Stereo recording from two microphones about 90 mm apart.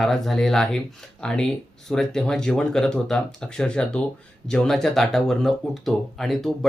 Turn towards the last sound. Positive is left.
turn(degrees=5)  # may be behind; listen again after turning